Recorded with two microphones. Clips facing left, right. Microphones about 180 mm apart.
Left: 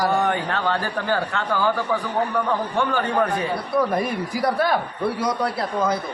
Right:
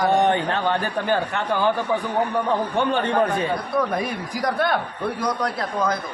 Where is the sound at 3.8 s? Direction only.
Centre (ahead or behind).